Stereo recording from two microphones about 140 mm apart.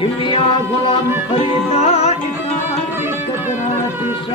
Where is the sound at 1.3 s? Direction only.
45° left (ahead or behind).